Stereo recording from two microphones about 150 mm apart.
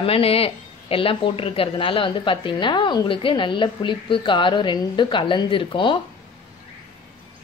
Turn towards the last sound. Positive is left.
turn(degrees=35)  # may be behind; listen again after turning